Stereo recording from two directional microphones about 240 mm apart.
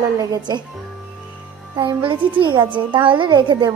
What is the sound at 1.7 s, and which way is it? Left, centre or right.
Music, centre.